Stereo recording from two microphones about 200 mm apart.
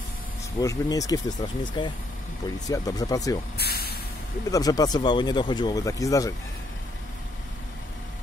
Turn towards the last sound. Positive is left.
turn(degrees=15)  # may be behind; listen again after turning